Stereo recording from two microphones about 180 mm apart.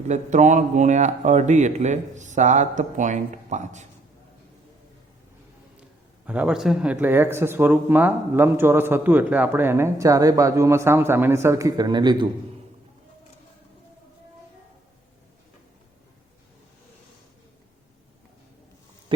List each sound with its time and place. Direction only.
0.1 s speech: 40° right (ahead or behind)
6.2 s speech: 5° right (ahead or behind); by 12.3 s 25° right (ahead or behind)